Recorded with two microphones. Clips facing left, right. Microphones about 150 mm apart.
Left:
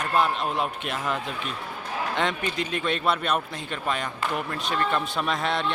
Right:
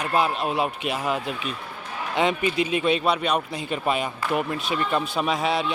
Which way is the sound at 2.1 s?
5° right (ahead or behind).